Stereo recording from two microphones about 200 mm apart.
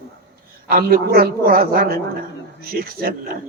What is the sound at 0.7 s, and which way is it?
A man's voice, 45° right (ahead or behind).